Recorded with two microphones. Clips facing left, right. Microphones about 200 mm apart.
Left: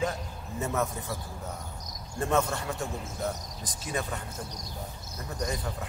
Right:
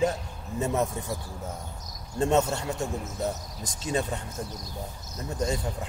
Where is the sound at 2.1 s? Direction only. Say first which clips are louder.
Right 4 dB; 25° right (ahead or behind).